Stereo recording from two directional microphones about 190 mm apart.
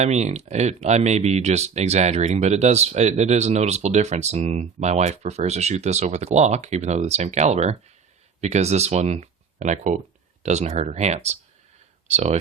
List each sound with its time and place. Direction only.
0.0 s speech: 35° right (ahead or behind)